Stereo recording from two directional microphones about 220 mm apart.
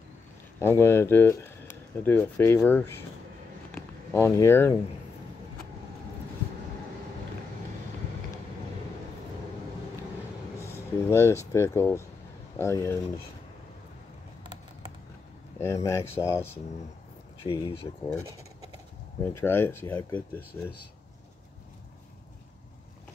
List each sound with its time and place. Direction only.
0.6 s speech: 10° left (ahead or behind)
10.6 s speech: 10° left (ahead or behind)
15.6 s speech: 15° left (ahead or behind)
17.5 s speech: 20° left (ahead or behind)
19.2 s speech: 10° left (ahead or behind)